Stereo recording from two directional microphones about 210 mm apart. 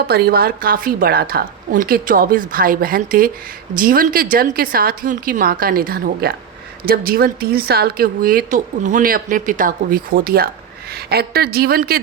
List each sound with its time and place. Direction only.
0.1 s speech: 45° right (ahead or behind)